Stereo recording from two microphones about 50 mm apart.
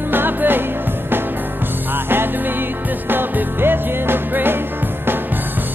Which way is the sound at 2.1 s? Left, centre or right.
Right.